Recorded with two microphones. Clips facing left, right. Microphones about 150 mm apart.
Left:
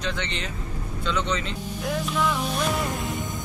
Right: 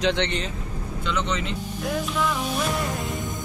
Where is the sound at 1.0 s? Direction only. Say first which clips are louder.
Even; 10° right (ahead or behind).